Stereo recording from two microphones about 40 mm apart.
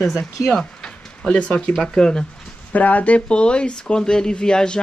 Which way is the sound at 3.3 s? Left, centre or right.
Left.